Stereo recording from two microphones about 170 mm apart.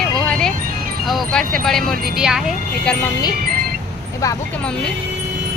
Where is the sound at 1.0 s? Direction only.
Centre (ahead or behind).